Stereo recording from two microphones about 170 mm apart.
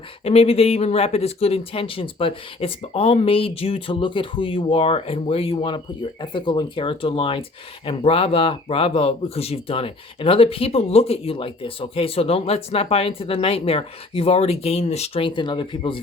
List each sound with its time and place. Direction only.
0.3 s speech: 35° left (ahead or behind)